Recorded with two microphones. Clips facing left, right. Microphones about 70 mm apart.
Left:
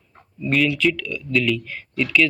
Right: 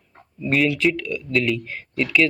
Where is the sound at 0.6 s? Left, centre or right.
Right.